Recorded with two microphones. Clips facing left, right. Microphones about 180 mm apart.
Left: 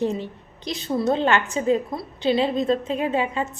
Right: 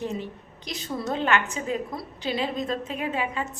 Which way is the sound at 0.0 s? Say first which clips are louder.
Left 6 dB; 30° left (ahead or behind).